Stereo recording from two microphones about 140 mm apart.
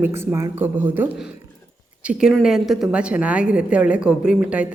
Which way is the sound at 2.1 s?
5° right (ahead or behind).